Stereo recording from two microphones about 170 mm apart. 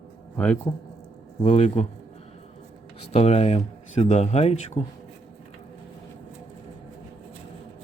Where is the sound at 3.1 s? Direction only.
40° left (ahead or behind).